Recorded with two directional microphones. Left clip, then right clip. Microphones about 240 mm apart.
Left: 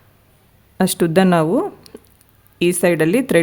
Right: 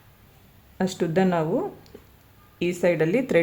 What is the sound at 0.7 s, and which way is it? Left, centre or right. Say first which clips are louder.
A woman's voice: left 8 dB; left.